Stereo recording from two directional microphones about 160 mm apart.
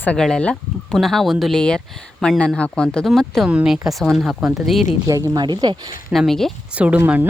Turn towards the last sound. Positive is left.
turn(degrees=-10)  # may be behind; listen again after turning